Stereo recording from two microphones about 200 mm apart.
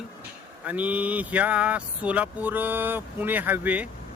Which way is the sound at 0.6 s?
5° right (ahead or behind).